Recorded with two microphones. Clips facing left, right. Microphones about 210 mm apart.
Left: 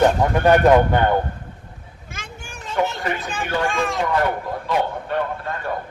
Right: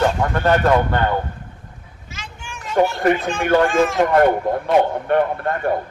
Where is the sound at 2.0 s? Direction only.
50° left (ahead or behind); by 2.7 s 35° left (ahead or behind).